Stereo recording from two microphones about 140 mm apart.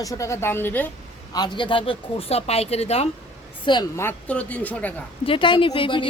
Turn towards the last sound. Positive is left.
turn(degrees=40)  # may be behind; listen again after turning